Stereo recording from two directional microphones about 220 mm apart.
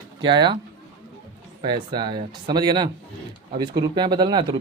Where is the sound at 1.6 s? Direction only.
20° right (ahead or behind).